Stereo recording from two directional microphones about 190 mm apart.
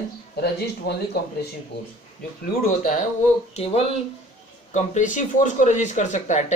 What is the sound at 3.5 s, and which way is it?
Speech, 35° left (ahead or behind).